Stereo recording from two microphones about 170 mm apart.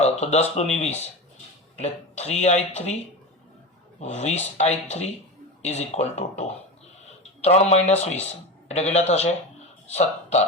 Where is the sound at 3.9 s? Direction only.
40° left (ahead or behind).